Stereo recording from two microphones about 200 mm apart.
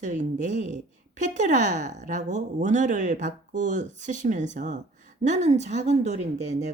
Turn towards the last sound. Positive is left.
turn(degrees=-35)  # may be behind; listen again after turning